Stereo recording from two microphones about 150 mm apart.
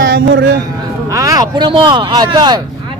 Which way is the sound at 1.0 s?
20° right (ahead or behind).